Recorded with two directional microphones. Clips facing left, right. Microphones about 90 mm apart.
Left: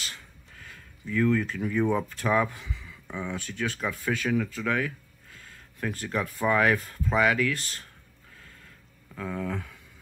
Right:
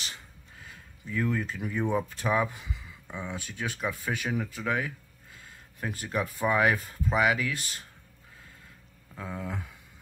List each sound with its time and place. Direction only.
1.4 s speech: 20° right (ahead or behind)
9.1 s speech: 15° right (ahead or behind)